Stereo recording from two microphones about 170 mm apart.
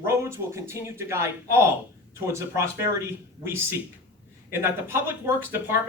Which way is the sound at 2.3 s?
15° right (ahead or behind).